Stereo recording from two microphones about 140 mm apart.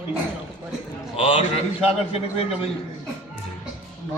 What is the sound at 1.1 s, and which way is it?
Speech, 45° left (ahead or behind).